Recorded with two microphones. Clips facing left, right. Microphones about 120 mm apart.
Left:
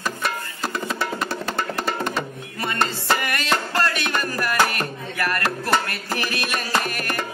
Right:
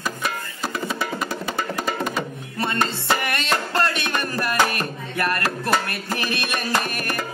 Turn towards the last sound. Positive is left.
turn(degrees=-20)  # may be behind; listen again after turning